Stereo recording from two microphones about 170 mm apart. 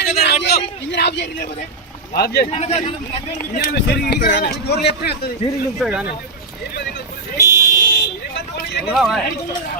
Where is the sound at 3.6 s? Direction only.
70° left (ahead or behind).